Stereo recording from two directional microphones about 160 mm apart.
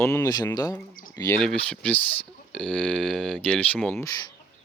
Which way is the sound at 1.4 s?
5° left (ahead or behind).